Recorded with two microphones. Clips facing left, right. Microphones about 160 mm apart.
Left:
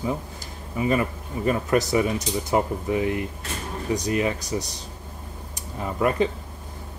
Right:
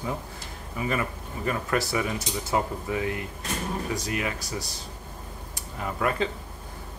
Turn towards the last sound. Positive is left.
turn(degrees=20)  # may be behind; listen again after turning